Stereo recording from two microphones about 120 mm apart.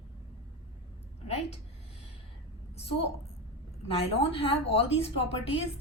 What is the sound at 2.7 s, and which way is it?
Speech, 55° left (ahead or behind).